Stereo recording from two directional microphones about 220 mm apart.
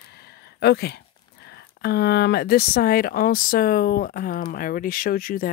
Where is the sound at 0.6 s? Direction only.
50° left (ahead or behind).